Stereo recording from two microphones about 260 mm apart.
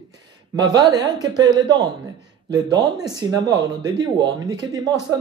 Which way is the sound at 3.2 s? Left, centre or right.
Centre.